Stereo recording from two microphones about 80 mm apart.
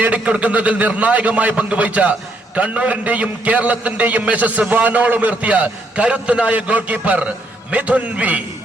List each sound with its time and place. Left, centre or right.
0.0 s a man's voice: centre